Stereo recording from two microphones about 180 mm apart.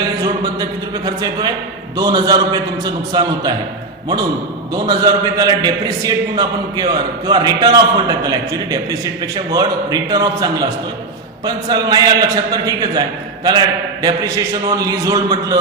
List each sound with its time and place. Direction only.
0.2 s a man's voice: 20° right (ahead or behind)
4.7 s a man's voice: 20° right (ahead or behind)